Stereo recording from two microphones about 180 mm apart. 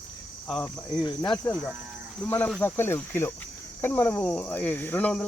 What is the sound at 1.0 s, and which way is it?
Speech, 25° left (ahead or behind).